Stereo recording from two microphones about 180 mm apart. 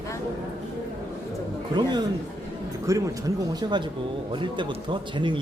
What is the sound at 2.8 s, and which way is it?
Speech, 20° right (ahead or behind).